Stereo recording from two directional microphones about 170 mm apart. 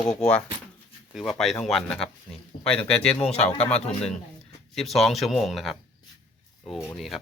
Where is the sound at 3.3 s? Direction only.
40° left (ahead or behind).